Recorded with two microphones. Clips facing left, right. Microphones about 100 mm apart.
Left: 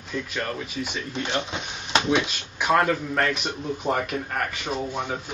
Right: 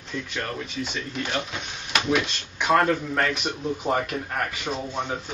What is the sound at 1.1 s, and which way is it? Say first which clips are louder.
Speech: left 2 dB; 25° left (ahead or behind).